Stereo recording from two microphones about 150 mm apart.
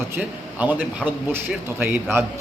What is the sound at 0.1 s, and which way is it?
A man's voice, 10° right (ahead or behind).